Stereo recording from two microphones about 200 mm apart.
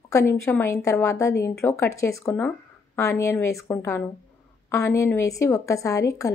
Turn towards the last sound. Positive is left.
turn(degrees=15)  # may be behind; listen again after turning